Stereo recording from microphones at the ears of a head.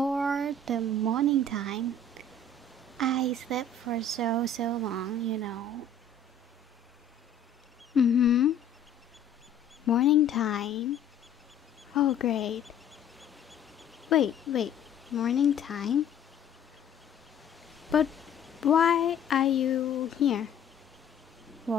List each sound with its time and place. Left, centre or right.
0.4 s a sound: right
3.0 s speech: right
7.9 s speech: left
9.8 s speech: left
12.9 s duck: centre
14.0 s speech: left
18.1 s a sound: centre
18.6 s speech: left